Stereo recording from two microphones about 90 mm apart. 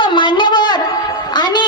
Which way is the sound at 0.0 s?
60° left (ahead or behind).